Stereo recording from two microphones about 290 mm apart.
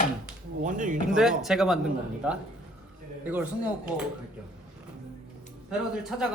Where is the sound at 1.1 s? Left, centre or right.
Centre.